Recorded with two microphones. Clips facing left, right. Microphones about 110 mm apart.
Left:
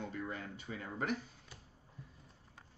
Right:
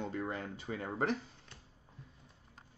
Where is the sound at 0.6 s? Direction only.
50° right (ahead or behind).